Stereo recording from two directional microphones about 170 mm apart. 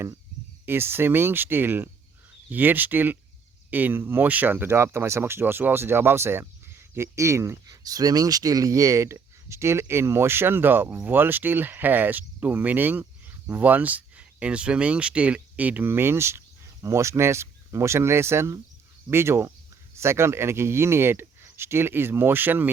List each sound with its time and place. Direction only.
0.6 s speech: 15° right (ahead or behind)